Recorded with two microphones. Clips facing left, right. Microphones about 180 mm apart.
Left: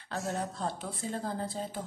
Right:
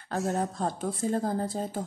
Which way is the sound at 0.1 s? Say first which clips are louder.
Right 6 dB; 45° right (ahead or behind).